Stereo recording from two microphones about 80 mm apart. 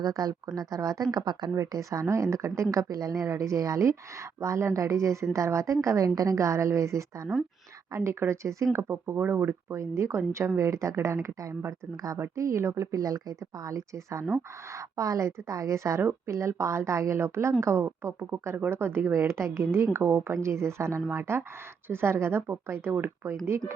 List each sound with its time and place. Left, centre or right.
0.0 s speech: right
1.1 s speech: right
1.5 s speech: right